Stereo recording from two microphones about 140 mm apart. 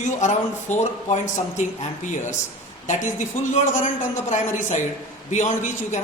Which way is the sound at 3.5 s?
60° left (ahead or behind).